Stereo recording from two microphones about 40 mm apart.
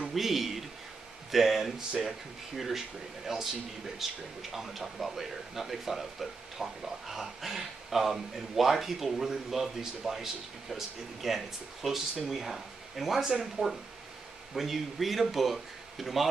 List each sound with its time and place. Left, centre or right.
0.1 s a man's voice: centre